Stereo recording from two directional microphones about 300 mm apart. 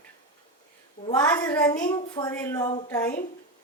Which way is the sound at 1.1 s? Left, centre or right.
Centre.